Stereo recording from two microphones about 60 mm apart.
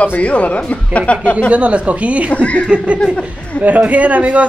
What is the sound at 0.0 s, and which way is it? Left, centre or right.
Speech, left.